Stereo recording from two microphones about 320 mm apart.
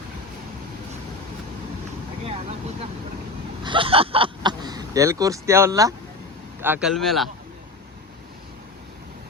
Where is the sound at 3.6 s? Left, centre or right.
Centre.